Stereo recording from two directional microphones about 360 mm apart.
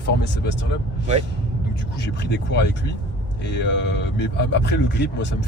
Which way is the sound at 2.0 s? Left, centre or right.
Left.